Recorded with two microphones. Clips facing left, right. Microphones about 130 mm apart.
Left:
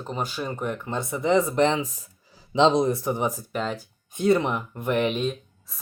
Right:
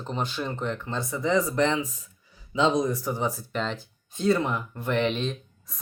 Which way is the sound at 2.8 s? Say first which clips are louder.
Left 3 dB; 25° left (ahead or behind).